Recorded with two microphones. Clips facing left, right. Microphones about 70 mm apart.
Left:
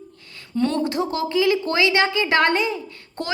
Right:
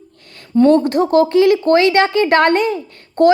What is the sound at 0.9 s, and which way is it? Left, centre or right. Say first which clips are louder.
Speech: right 10 dB; right.